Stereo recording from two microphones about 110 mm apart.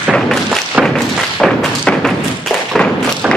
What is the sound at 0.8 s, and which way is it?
Thump, 5° left (ahead or behind).